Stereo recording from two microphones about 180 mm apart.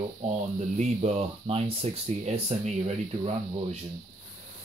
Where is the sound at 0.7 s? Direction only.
35° right (ahead or behind).